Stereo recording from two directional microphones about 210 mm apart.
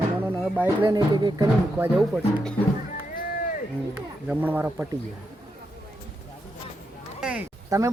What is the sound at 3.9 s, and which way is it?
Speech, 10° right (ahead or behind).